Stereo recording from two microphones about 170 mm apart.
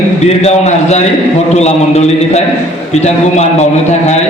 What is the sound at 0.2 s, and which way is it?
A man's voice, 40° left (ahead or behind).